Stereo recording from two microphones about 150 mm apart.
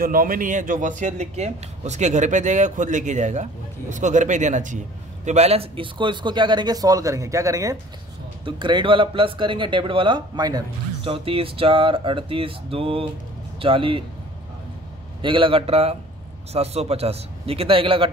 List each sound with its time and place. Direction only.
0.0 s a man's voice: 70° right (ahead or behind); by 7.7 s 20° right (ahead or behind)
8.5 s a man's voice: 30° right (ahead or behind)
11.1 s a man's voice: 40° right (ahead or behind)
15.2 s a man's voice: 35° right (ahead or behind)